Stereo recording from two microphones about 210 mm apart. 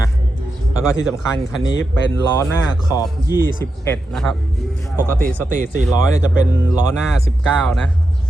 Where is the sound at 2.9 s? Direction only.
20° left (ahead or behind).